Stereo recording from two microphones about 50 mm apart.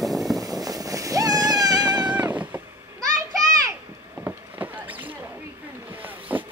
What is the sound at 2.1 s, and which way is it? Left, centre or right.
Cat, right.